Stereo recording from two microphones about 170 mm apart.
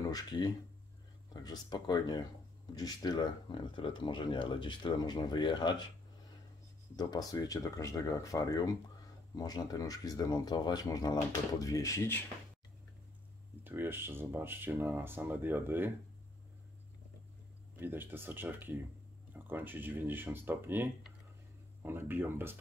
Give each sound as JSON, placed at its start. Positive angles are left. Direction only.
{"t": 0.1, "sound": "speech", "side_deg": 25}
{"t": 7.0, "sound": "speech", "side_deg": 20}
{"t": 13.7, "sound": "speech", "side_deg": -10}
{"t": 17.7, "sound": "speech", "side_deg": -10}